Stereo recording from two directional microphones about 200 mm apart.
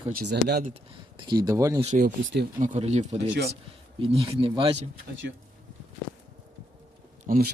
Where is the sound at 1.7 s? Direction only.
35° right (ahead or behind).